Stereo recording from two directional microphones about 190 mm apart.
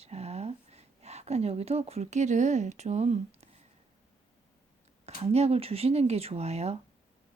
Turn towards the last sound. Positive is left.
turn(degrees=-35)  # may be behind; listen again after turning